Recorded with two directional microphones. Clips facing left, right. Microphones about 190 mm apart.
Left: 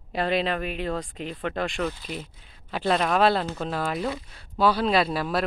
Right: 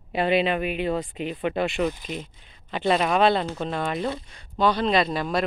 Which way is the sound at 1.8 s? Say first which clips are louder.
Right 3 dB; 15° right (ahead or behind).